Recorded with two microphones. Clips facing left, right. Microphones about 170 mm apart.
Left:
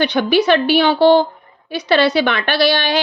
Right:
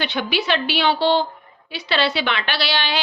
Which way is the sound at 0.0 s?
45° left (ahead or behind).